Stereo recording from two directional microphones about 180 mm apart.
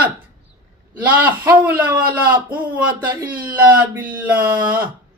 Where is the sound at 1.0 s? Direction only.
10° right (ahead or behind).